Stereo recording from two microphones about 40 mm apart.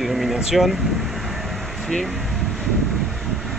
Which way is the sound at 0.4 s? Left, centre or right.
Centre.